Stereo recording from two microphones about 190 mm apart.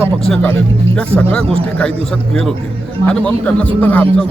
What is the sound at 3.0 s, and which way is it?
Speech, 5° left (ahead or behind).